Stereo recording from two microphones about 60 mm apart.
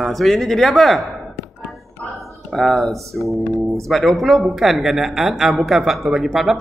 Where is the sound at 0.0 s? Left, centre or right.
Centre.